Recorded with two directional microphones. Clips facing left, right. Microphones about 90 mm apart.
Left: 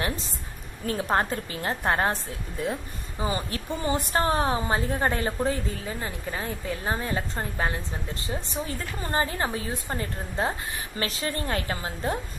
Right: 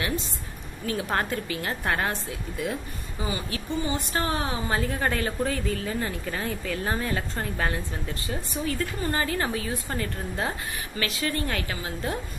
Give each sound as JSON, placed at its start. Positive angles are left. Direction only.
{"t": 1.0, "sound": "a woman's voice", "side_deg": 30}
{"t": 4.7, "sound": "a woman's voice", "side_deg": 25}